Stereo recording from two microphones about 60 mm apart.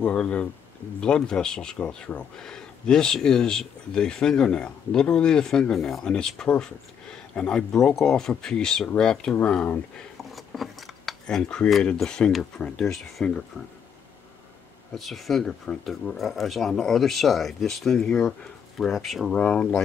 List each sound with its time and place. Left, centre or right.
0.0 s speech: centre
9.3 s speech: left
9.9 s scissors: centre
11.2 s speech: centre
15.0 s speech: centre
19.4 s speech: centre